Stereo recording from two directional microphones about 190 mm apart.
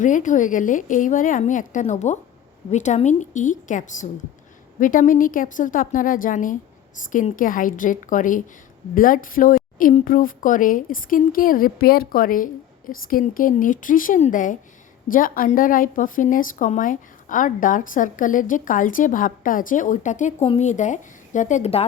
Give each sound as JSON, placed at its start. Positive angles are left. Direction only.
{"t": 0.0, "sound": "a woman's voice", "side_deg": 40}